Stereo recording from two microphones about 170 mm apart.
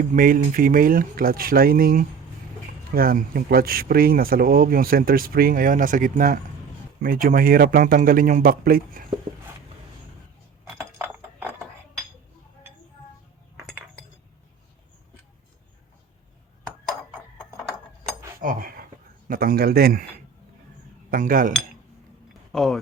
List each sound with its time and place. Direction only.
0.0 s speech: 55° right (ahead or behind)
10.7 s chink: 15° right (ahead or behind)
18.3 s cutlery: 60° right (ahead or behind)
19.3 s speech: 60° right (ahead or behind)
21.1 s speech: 55° right (ahead or behind)
22.5 s speech: centre (ahead or behind)